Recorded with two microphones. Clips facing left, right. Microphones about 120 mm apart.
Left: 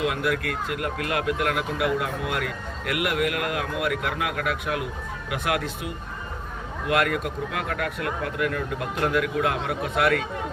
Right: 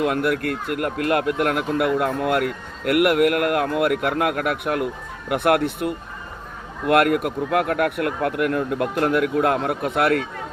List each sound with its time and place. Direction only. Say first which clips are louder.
0.0 s speech: right 4 dB; 50° right (ahead or behind)